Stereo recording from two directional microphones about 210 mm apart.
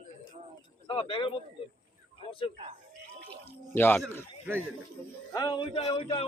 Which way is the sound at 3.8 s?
10° left (ahead or behind).